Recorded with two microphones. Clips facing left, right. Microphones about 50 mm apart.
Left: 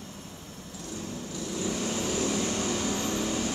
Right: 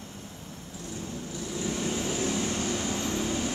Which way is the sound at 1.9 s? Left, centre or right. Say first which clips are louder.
Even; right.